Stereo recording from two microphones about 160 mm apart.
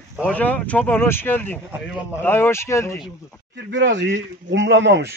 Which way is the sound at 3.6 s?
90° right.